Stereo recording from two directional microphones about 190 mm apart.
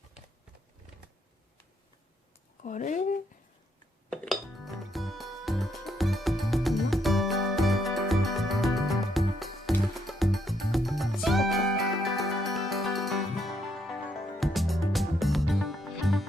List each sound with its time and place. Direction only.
2.6 s speech: 40° left (ahead or behind)
4.1 s music: 5° left (ahead or behind)